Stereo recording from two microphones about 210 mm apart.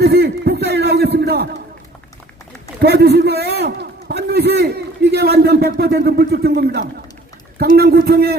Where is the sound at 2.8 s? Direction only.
50° right (ahead or behind).